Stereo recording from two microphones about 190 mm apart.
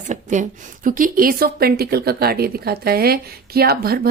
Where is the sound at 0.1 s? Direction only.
40° right (ahead or behind).